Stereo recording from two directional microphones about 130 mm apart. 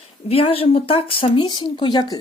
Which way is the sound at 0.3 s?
50° left (ahead or behind).